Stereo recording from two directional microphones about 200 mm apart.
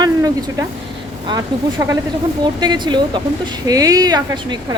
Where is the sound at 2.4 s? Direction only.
20° right (ahead or behind).